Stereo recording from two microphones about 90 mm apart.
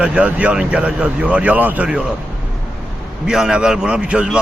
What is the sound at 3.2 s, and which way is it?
Speech, 10° right (ahead or behind).